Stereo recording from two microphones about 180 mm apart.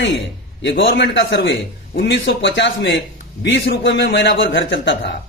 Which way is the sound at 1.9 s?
70° left (ahead or behind).